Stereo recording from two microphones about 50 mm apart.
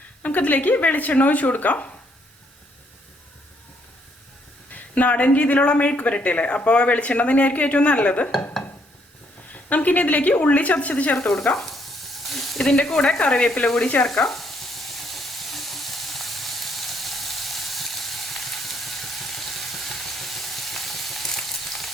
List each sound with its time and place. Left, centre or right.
0.2 s speech: left
4.7 s speech: left
9.5 s speech: left
11.2 s stir: centre
12.3 s frying: centre
12.6 s speech: centre
14.0 s frying: centre